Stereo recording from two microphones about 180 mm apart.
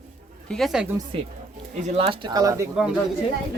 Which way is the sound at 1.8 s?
35° right (ahead or behind).